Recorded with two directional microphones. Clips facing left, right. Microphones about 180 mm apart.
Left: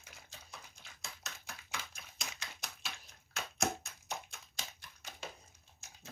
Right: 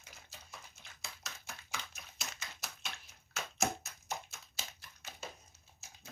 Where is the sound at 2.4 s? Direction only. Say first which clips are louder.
Even; 5° right (ahead or behind).